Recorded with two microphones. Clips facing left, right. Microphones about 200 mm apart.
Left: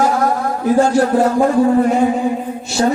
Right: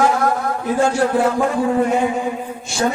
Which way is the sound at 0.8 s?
40° left (ahead or behind).